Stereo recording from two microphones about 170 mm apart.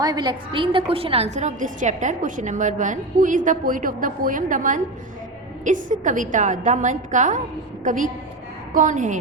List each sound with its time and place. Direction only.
0.0 s a woman's voice: 25° right (ahead or behind); by 9.1 s 45° right (ahead or behind)